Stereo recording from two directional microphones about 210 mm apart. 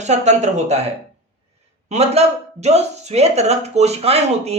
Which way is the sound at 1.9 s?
30° right (ahead or behind).